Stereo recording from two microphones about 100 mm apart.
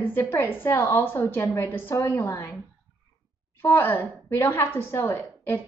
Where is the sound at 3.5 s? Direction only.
25° left (ahead or behind).